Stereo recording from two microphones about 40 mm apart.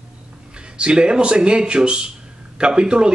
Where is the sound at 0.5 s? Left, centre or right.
Right.